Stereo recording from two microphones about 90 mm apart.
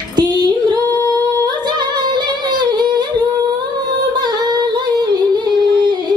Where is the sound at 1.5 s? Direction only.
55° right (ahead or behind).